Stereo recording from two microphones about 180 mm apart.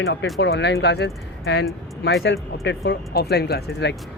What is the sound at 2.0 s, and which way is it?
Speech, 85° left.